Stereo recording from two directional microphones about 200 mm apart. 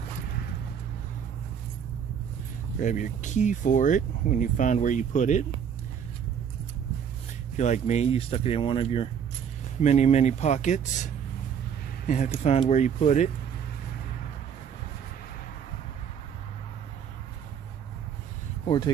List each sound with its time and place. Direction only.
2.8 s speech: 40° left (ahead or behind)
7.5 s speech: 35° left (ahead or behind)
12.1 s speech: 35° left (ahead or behind)